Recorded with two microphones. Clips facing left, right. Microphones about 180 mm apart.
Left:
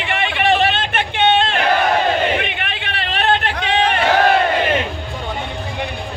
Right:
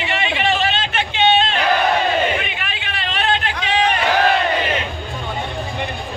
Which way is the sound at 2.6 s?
65° left (ahead or behind).